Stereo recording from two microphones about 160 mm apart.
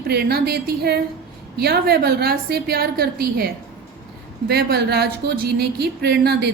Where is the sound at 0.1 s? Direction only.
80° right.